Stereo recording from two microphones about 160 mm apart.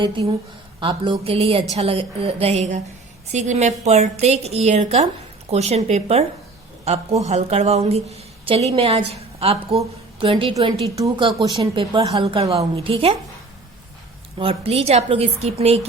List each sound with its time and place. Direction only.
0.2 s a woman's voice: 30° right (ahead or behind)
14.3 s a woman's voice: 35° right (ahead or behind)